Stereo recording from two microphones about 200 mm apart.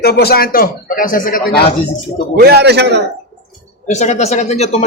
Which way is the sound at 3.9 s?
35° left (ahead or behind).